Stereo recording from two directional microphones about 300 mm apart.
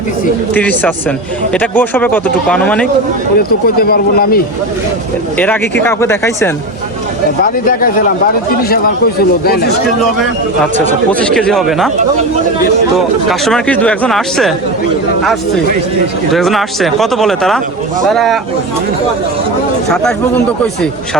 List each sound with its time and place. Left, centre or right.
0.5 s speech: centre
3.3 s speech: left
5.8 s speech: centre
7.4 s speech: left
9.4 s speech: left
10.8 s speech: centre
13.2 s speech: centre
16.3 s speech: centre